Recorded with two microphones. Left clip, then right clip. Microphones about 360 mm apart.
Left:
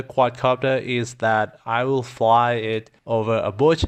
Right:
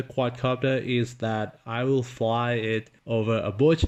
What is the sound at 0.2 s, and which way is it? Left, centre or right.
Speech, centre.